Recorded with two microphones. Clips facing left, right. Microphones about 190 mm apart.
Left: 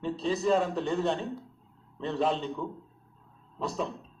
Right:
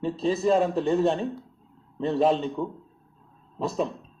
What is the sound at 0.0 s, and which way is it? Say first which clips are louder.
Speech: right 4 dB; 15° right (ahead or behind).